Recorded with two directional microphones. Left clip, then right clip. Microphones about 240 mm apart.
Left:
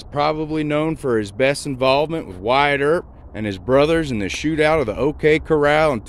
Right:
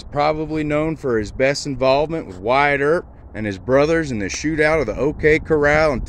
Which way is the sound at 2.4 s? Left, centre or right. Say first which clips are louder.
Even; centre.